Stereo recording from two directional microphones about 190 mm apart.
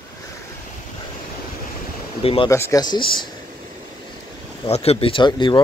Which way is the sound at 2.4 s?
15° left (ahead or behind).